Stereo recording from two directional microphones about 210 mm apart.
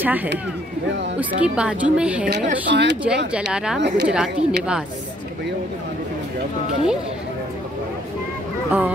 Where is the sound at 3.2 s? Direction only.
5° right (ahead or behind).